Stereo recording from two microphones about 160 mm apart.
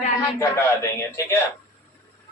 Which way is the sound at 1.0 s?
15° left (ahead or behind).